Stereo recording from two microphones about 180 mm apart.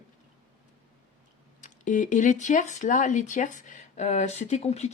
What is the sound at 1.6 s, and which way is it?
Speech, 45° left (ahead or behind).